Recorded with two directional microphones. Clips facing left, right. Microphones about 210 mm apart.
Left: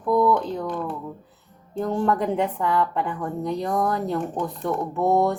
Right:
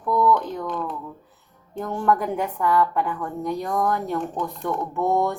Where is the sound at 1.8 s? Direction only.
30° left (ahead or behind).